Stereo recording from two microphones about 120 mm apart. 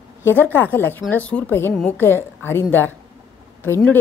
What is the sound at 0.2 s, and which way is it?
A woman's voice, 15° left (ahead or behind).